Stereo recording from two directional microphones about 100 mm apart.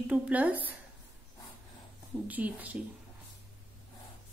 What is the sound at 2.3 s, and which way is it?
Speech, 15° right (ahead or behind).